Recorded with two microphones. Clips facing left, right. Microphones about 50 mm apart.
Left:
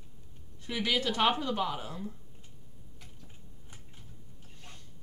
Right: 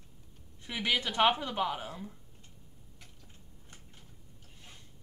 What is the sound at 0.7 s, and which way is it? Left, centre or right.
Speech, centre.